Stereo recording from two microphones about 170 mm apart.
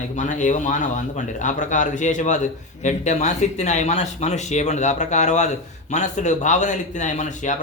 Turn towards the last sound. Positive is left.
turn(degrees=45)  # may be behind; listen again after turning